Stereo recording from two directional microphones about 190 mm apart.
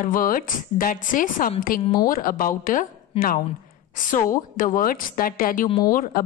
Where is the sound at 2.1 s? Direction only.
45° left (ahead or behind).